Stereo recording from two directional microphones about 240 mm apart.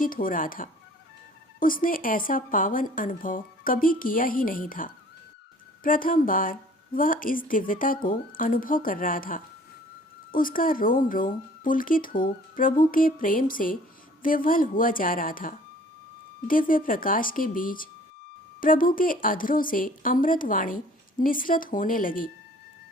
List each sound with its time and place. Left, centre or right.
0.0 s a woman's voice: left